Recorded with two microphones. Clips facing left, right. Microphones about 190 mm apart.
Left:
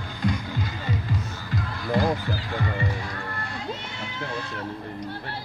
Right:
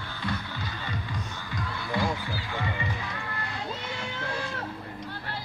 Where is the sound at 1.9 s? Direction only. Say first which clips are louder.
Left 6 dB; 45° left (ahead or behind).